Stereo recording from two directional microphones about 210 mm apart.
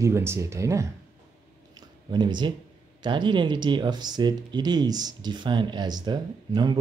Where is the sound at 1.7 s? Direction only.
20° right (ahead or behind).